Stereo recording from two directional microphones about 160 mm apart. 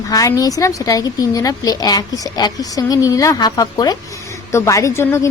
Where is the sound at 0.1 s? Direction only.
20° left (ahead or behind).